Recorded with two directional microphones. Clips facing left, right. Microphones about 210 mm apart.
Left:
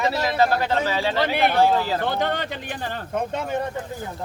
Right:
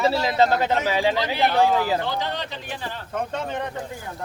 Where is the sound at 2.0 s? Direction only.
55° left (ahead or behind).